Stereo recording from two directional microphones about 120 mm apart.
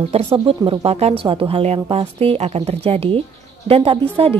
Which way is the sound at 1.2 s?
50° right (ahead or behind).